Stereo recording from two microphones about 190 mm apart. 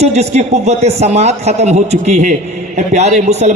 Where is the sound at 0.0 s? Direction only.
35° right (ahead or behind).